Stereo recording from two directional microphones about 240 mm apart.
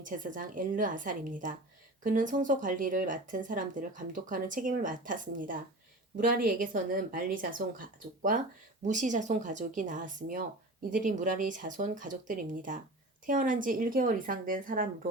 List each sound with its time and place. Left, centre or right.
0.0 s speech: right